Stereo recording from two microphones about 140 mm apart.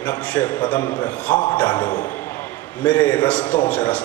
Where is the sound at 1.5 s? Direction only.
30° left (ahead or behind).